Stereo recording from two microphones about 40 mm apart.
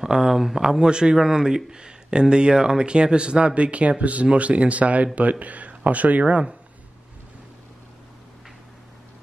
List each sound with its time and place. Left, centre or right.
0.0 s speech: centre
0.6 s speech: centre; by 6.4 s right